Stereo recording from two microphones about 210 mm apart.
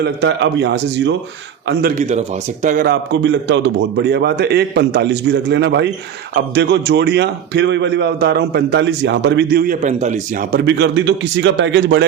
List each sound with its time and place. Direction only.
0.0 s a man's voice: 55° right (ahead or behind)
2.0 s speech: 35° right (ahead or behind)
2.6 s a man's voice: 45° right (ahead or behind)
10.7 s a man's voice: 55° right (ahead or behind)